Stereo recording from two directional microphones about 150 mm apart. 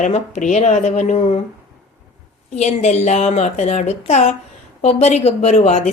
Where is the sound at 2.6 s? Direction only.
50° left (ahead or behind).